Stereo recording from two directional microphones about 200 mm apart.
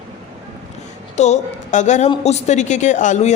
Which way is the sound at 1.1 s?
35° left (ahead or behind).